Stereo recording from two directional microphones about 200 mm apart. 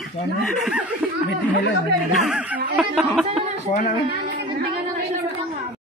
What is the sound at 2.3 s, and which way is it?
Speech, 5° right (ahead or behind).